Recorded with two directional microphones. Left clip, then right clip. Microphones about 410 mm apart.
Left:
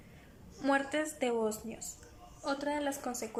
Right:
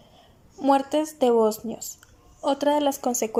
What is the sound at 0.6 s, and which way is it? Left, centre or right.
A woman's voice, centre.